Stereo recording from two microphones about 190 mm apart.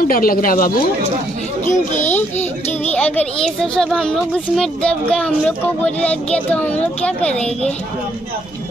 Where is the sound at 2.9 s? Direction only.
5° left (ahead or behind).